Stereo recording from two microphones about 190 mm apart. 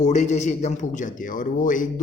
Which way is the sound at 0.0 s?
40° left (ahead or behind).